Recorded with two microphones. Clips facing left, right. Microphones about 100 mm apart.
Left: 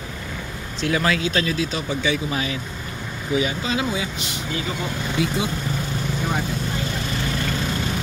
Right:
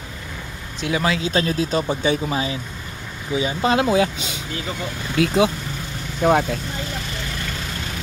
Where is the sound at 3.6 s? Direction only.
65° right (ahead or behind).